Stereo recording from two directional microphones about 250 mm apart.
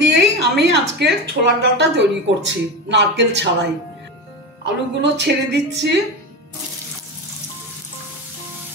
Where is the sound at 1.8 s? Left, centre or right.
Right.